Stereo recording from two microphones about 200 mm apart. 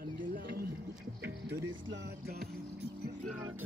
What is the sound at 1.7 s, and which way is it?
Music, 60° right (ahead or behind).